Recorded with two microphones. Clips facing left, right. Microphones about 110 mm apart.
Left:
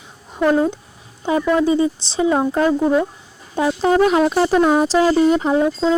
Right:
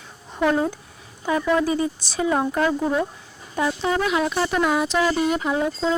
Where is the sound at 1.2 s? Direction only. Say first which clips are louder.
Left 4 dB; 25° left (ahead or behind).